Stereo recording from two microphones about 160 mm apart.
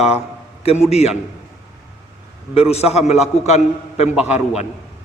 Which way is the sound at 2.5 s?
40° left (ahead or behind).